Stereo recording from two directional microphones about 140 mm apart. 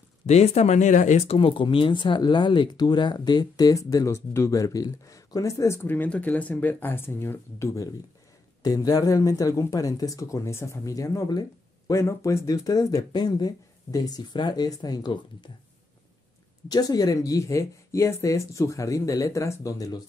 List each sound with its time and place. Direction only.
0.3 s speech: 50° left (ahead or behind); by 15.5 s 30° left (ahead or behind)
16.6 s speech: 30° left (ahead or behind)